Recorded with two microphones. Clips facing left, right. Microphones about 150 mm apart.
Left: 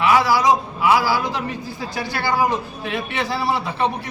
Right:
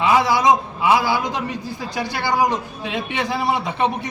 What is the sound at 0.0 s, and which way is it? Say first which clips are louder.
A man's voice: even; 20° right (ahead or behind).